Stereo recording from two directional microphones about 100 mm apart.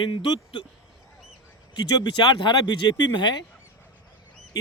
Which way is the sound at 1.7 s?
50° left (ahead or behind).